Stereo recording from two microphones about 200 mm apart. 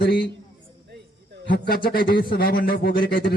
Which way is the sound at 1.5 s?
45° left (ahead or behind).